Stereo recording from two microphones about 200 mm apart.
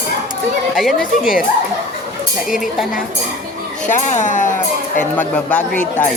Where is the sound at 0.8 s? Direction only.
Centre (ahead or behind).